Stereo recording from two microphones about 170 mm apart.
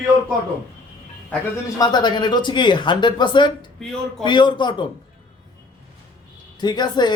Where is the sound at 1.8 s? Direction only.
25° left (ahead or behind).